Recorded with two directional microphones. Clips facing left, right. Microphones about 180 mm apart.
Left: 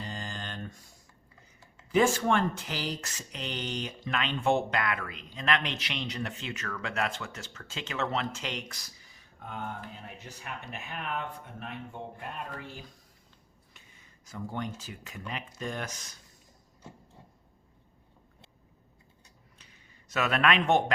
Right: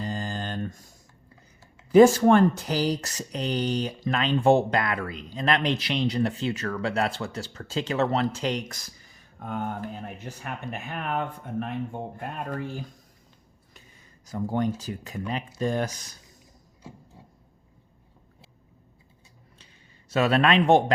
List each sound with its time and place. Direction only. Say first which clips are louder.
0.0 s a sound: right 8 dB; 40° right (ahead or behind)
1.9 s speech: right 10 dB; 40° right (ahead or behind)
14.3 s speech: right 9 dB; 40° right (ahead or behind)
20.1 s speech: right 5 dB; 30° right (ahead or behind)